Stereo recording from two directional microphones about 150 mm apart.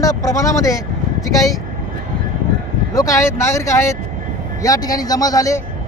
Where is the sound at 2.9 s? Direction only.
20° left (ahead or behind).